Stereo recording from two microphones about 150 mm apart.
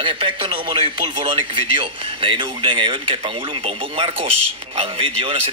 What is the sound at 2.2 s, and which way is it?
Speech, 35° right (ahead or behind).